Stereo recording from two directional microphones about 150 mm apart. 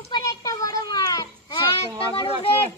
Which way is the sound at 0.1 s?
25° left (ahead or behind).